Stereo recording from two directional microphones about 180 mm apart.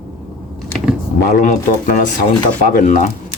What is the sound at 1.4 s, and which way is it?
Speech, 50° left (ahead or behind).